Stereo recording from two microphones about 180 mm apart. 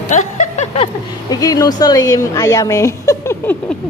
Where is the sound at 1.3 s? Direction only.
20° left (ahead or behind).